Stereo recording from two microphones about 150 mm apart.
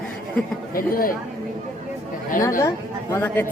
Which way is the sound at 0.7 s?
70° left (ahead or behind).